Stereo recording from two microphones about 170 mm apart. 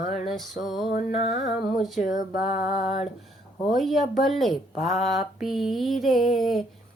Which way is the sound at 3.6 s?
Centre (ahead or behind).